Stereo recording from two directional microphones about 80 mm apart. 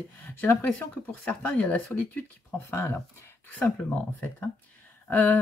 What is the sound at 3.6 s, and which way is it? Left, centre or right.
Speech, centre.